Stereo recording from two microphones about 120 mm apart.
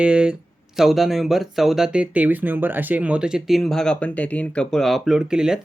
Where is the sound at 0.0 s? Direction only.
10° right (ahead or behind).